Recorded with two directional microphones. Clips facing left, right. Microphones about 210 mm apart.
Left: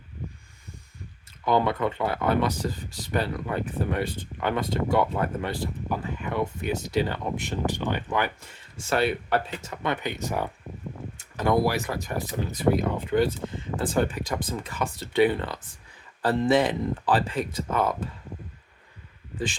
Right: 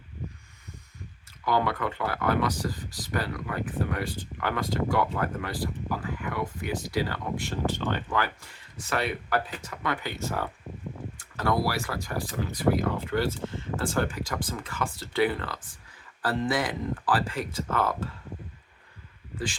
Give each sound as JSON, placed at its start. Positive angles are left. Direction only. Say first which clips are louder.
{"t": 1.5, "sound": "speech", "louder": "left 3 dB", "side_deg": 20}